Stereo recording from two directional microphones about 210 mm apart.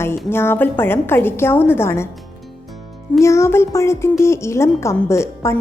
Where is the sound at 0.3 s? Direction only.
10° left (ahead or behind).